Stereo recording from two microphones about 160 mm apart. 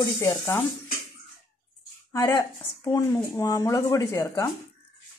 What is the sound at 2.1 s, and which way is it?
Speech, 20° left (ahead or behind).